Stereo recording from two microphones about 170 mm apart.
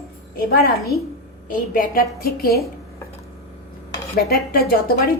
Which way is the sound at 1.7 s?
55° left (ahead or behind).